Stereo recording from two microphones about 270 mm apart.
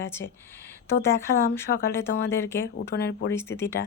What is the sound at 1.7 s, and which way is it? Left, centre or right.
Speech, left.